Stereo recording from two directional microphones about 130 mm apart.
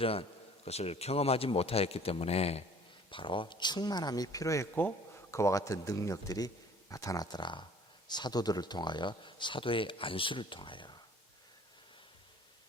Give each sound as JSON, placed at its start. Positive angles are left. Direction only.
{"t": 0.0, "sound": "speech", "side_deg": 45}
{"t": 3.1, "sound": "speech", "side_deg": 40}